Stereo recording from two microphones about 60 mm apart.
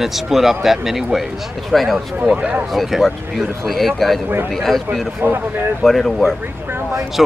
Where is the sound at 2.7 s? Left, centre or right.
Centre.